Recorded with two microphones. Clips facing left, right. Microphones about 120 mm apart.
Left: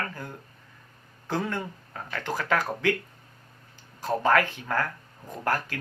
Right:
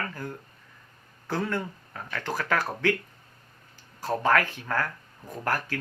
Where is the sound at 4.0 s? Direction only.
15° left (ahead or behind).